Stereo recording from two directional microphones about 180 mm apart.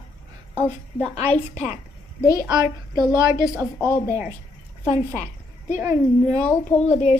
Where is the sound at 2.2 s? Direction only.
20° left (ahead or behind).